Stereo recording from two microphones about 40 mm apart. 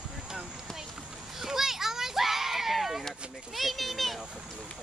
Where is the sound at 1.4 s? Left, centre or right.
Centre.